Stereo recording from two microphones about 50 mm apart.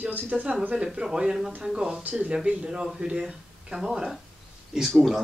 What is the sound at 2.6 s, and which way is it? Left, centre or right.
Speech, centre.